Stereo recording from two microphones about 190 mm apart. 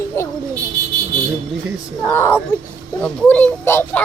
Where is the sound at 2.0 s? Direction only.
10° left (ahead or behind).